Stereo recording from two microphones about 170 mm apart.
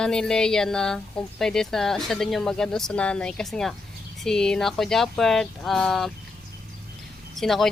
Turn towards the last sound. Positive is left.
turn(degrees=0)  # may be behind; listen again after turning